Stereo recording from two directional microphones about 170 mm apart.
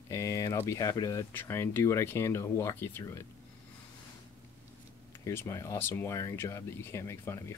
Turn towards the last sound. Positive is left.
turn(degrees=15)  # may be behind; listen again after turning